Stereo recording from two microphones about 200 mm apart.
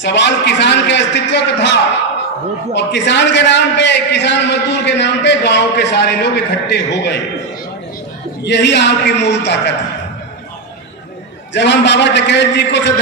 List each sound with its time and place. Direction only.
0.0 s a man's voice: 60° left (ahead or behind)
8.4 s a man's voice: 60° left (ahead or behind)
11.5 s a man's voice: 60° left (ahead or behind)